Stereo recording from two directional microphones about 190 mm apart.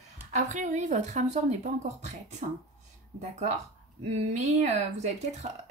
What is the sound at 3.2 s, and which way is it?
Speech, 40° right (ahead or behind).